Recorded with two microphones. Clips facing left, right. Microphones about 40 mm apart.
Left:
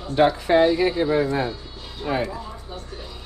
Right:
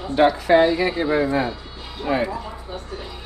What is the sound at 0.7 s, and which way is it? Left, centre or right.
A man's voice, right.